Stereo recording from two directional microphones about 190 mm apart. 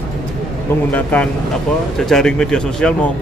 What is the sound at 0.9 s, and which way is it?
Speech, 10° left (ahead or behind).